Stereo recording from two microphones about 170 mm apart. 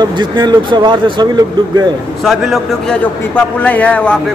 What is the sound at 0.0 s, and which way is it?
Speech, 25° right (ahead or behind).